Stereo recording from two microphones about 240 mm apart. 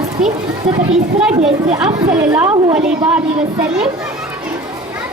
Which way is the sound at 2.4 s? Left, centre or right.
Right.